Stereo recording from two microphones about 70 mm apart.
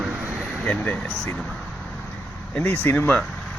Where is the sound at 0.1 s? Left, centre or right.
Centre.